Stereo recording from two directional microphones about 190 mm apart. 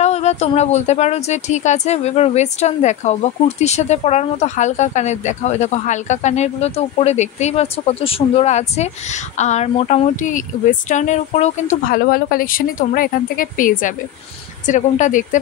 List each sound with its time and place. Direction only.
0.0 s speech: 35° left (ahead or behind)